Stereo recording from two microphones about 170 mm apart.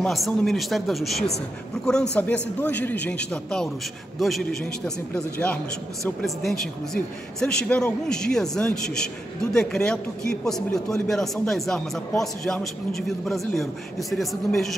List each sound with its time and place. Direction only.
0.0 s a man's voice: 5° left (ahead or behind)